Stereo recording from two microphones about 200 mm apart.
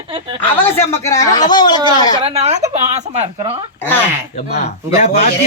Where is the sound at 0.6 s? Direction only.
15° left (ahead or behind).